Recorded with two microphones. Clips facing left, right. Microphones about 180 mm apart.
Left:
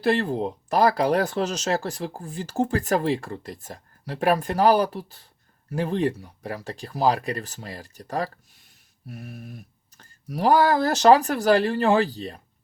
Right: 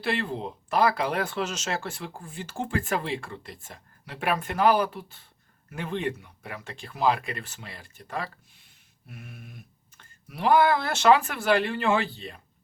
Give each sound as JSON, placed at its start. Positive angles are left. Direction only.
{"t": 0.0, "sound": "speech", "side_deg": 40}